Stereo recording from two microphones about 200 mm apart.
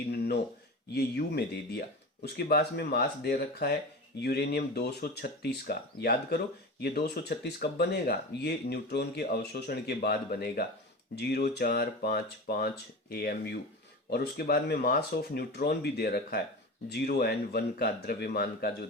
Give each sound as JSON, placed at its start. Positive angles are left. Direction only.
{"t": 0.1, "sound": "speech", "side_deg": 55}